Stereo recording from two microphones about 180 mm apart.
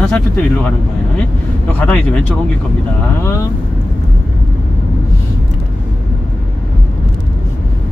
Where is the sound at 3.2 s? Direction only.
15° left (ahead or behind).